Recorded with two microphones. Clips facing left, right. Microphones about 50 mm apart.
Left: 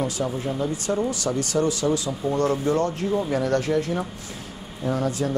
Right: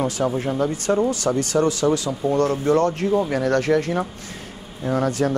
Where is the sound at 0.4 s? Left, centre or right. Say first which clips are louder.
Right 4 dB; right.